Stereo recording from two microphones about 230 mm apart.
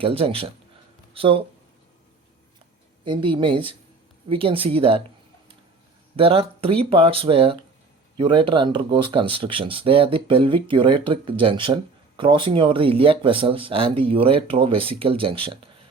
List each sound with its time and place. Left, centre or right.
0.0 s speech: right
3.0 s speech: right
6.1 s speech: right